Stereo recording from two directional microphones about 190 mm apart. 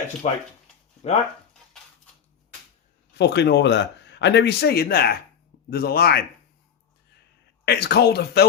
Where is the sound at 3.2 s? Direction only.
65° left (ahead or behind).